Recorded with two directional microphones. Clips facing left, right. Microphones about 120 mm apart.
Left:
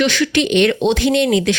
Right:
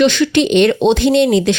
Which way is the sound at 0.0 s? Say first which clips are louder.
Right 4 dB; 25° right (ahead or behind).